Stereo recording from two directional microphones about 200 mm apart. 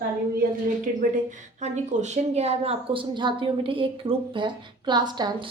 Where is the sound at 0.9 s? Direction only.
45° right (ahead or behind).